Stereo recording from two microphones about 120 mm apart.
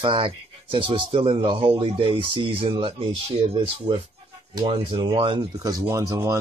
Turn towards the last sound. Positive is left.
turn(degrees=-30)  # may be behind; listen again after turning